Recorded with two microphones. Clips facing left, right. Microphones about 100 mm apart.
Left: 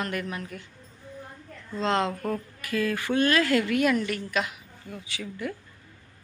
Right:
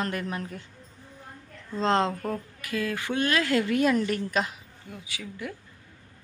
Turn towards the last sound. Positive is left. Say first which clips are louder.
# left 3 dB
turn(degrees=-10)  # may be behind; listen again after turning